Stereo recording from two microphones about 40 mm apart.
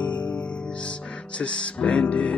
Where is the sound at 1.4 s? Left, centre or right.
Left.